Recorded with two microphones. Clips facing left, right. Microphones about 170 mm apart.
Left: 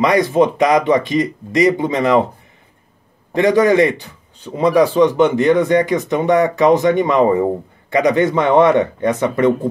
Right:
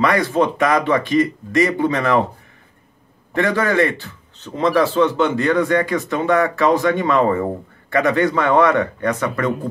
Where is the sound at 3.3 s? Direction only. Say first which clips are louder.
Left 5 dB; 20° left (ahead or behind).